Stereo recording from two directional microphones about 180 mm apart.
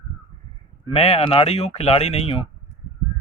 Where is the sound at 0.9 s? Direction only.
35° left (ahead or behind).